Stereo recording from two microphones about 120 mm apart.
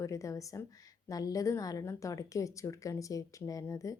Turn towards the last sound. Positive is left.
turn(degrees=25)  # may be behind; listen again after turning